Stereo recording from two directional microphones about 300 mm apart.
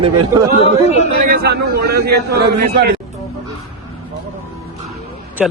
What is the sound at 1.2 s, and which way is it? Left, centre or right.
A man's voice, right.